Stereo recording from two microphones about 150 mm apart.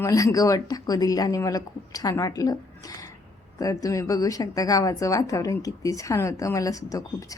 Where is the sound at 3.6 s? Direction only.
25° left (ahead or behind).